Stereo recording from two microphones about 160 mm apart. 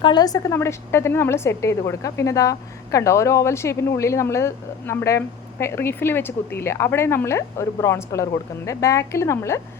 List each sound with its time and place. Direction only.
0.0 s a woman's voice: 25° left (ahead or behind)